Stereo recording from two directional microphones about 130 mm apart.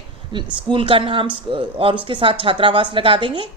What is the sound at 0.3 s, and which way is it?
A woman's voice, 40° right (ahead or behind).